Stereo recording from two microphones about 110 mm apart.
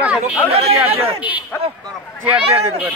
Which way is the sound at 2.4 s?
65° right (ahead or behind).